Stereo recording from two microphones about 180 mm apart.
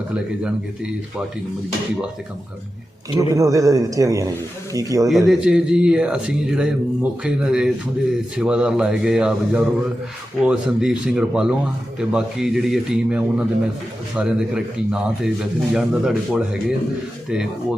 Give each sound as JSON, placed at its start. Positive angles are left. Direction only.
{"t": 3.2, "sound": "speech", "side_deg": -20}
{"t": 5.0, "sound": "speech", "side_deg": 0}